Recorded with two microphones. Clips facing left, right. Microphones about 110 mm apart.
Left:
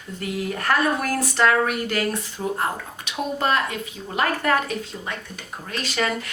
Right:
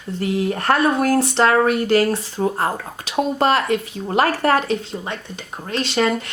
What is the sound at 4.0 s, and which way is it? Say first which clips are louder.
Speech: right 8 dB; 45° right (ahead or behind).